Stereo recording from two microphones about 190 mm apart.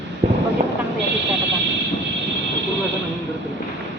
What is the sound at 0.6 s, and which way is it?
Vehicle, 35° right (ahead or behind).